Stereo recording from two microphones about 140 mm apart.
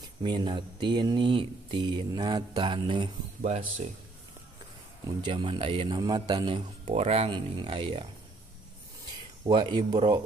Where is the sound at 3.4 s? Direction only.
55° right (ahead or behind).